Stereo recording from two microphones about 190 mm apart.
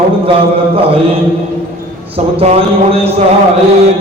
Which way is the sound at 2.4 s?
30° right (ahead or behind).